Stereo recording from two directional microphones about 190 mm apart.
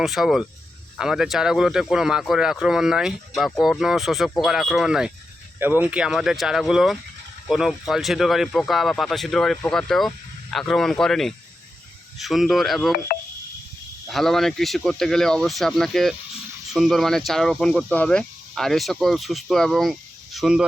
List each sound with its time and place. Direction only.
0.0 s speech: centre (ahead or behind)
13.1 s a sound: 50° left (ahead or behind)
14.1 s speech: centre (ahead or behind)